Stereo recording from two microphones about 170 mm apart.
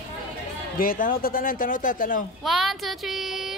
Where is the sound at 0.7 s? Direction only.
55° left (ahead or behind).